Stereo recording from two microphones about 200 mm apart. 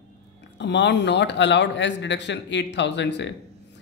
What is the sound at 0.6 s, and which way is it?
Speech, 60° left (ahead or behind).